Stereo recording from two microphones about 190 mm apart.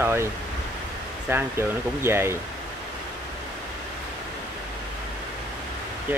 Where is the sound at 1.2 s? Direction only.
10° right (ahead or behind).